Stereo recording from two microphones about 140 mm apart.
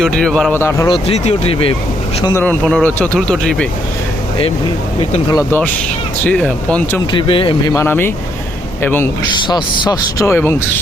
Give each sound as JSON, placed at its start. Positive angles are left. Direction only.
{"t": 0.0, "sound": "speech", "side_deg": 5}
{"t": 0.5, "sound": "speech", "side_deg": 20}
{"t": 0.9, "sound": "speech", "side_deg": 45}
{"t": 2.3, "sound": "speech", "side_deg": 10}
{"t": 5.3, "sound": "speech", "side_deg": 20}
{"t": 7.1, "sound": "speech", "side_deg": 35}
{"t": 7.7, "sound": "speech", "side_deg": 20}
{"t": 9.5, "sound": "speech", "side_deg": 30}